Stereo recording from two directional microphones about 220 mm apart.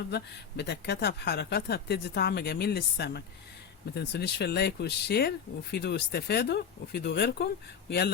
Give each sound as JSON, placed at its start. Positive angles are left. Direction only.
{"t": 0.1, "sound": "speech", "side_deg": 50}